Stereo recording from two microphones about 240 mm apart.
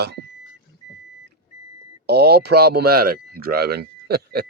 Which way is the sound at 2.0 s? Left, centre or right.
Right.